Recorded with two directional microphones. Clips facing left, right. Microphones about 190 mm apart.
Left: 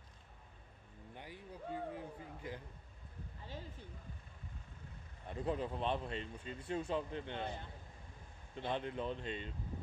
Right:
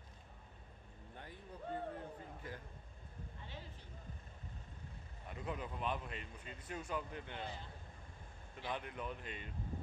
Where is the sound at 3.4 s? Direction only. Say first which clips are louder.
Left 6 dB; 40° left (ahead or behind).